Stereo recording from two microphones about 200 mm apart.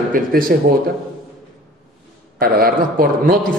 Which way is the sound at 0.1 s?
45° right (ahead or behind).